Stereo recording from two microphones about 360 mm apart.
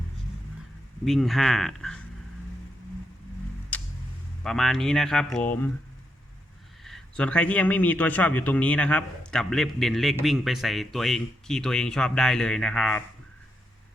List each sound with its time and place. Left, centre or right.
1.0 s a man's voice: centre
3.7 s a sound: centre
4.4 s a man's voice: centre
6.8 s a man's voice: centre